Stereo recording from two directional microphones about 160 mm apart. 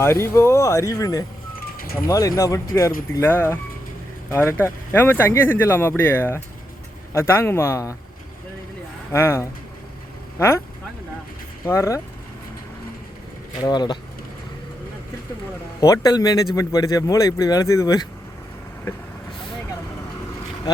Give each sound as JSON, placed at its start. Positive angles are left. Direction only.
{"t": 0.0, "sound": "speech", "side_deg": 20}
{"t": 9.1, "sound": "speech", "side_deg": 15}
{"t": 11.6, "sound": "speech", "side_deg": 15}
{"t": 13.7, "sound": "speech", "side_deg": 25}
{"t": 15.8, "sound": "speech", "side_deg": 25}